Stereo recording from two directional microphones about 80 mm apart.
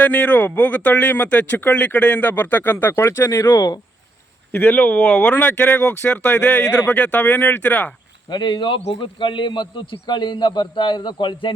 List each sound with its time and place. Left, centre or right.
0.0 s a man's voice: centre
3.5 s speech: left
4.5 s a man's voice: left
8.3 s a man's voice: left